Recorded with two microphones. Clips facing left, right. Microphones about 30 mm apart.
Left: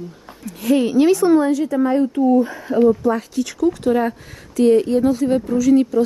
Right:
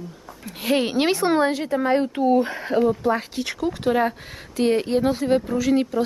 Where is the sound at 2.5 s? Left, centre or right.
Right.